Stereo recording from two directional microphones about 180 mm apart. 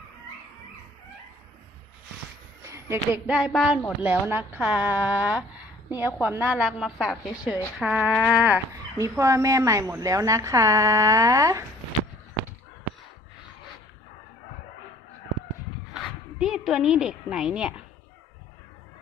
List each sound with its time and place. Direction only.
2.6 s a woman's voice: 15° right (ahead or behind)
16.4 s a woman's voice: centre (ahead or behind)